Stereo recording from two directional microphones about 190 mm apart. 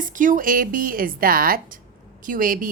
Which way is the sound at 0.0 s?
45° right (ahead or behind).